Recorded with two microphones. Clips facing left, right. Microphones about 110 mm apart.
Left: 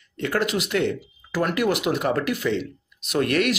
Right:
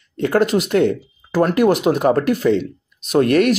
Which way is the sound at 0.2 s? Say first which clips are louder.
Right 8 dB; 40° right (ahead or behind).